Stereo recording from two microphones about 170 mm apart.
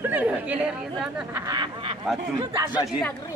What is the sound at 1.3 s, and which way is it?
Speech, 25° right (ahead or behind).